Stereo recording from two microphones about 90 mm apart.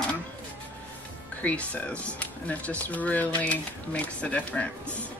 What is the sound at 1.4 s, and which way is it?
Speech, 15° left (ahead or behind).